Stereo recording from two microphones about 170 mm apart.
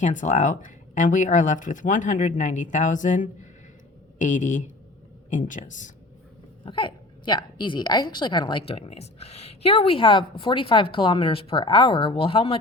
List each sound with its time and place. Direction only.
0.0 s speech: 45° left (ahead or behind)
6.7 s speech: 30° left (ahead or behind)